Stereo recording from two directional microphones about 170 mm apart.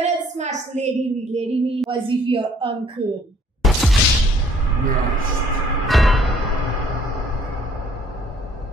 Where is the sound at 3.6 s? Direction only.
Centre (ahead or behind).